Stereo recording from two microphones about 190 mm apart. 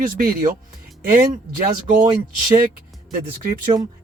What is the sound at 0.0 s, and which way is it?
Speech, 45° right (ahead or behind).